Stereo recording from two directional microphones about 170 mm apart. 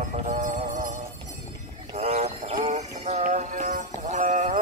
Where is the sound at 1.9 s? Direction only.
40° right (ahead or behind).